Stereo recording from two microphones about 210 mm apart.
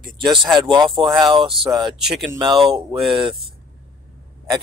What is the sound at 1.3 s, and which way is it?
Speech, 25° right (ahead or behind).